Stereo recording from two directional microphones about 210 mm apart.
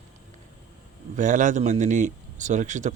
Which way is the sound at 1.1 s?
35° right (ahead or behind).